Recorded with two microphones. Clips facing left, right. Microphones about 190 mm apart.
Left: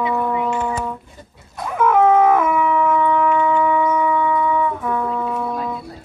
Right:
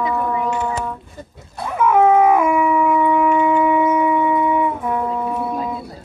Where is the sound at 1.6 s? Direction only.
5° right (ahead or behind).